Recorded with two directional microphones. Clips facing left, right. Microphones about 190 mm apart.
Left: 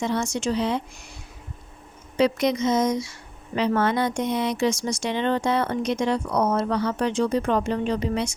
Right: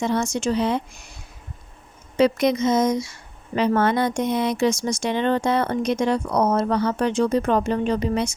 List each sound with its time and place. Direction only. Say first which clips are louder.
0.0 s a woman's voice: right 2 dB; 45° right (ahead or behind)
2.1 s a woman's voice: right 3 dB; 50° right (ahead or behind)